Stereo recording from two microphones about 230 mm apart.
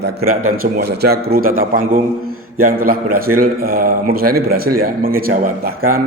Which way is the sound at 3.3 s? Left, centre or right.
Right.